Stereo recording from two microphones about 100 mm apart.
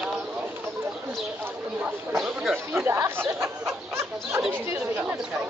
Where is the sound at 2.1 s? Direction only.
Centre (ahead or behind).